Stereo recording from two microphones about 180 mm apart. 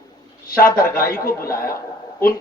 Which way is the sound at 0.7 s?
55° left (ahead or behind).